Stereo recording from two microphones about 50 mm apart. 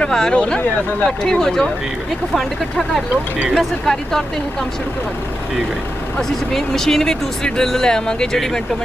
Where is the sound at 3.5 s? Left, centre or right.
Centre.